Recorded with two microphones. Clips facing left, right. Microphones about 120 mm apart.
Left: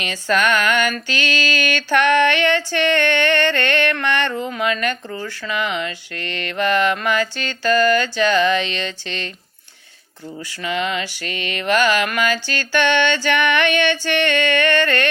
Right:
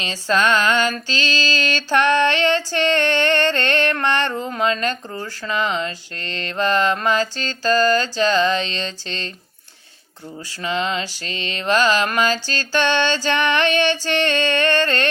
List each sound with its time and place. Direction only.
0.0 s female singing: 30° right (ahead or behind)
1.3 s speech: 30° right (ahead or behind)
10.6 s speech: 30° right (ahead or behind)